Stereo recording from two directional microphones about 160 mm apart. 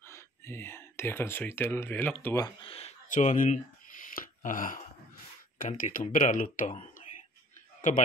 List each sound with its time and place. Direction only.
0.0 s speech: 15° left (ahead or behind)
2.6 s speech: 35° left (ahead or behind)
3.1 s speech: 50° left (ahead or behind)